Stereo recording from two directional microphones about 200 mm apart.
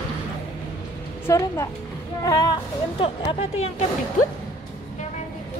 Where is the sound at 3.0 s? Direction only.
30° left (ahead or behind).